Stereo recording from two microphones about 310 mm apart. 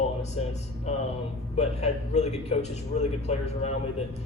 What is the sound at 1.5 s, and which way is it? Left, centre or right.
A man's voice, left.